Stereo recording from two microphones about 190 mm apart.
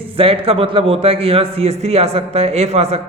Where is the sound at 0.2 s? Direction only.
30° right (ahead or behind).